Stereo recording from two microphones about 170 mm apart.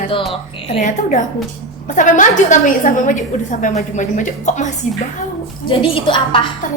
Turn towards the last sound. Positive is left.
turn(degrees=30)  # may be behind; listen again after turning